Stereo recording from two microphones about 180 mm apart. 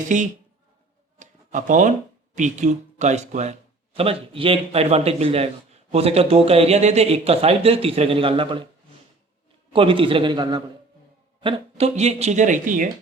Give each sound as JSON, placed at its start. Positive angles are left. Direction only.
{"t": 0.0, "sound": "speech", "side_deg": -45}
{"t": 1.2, "sound": "a sound", "side_deg": -45}
{"t": 2.3, "sound": "speech", "side_deg": -45}
{"t": 9.7, "sound": "a man's voice", "side_deg": -30}